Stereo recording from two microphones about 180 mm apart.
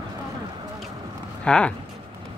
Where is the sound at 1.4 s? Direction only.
5° left (ahead or behind).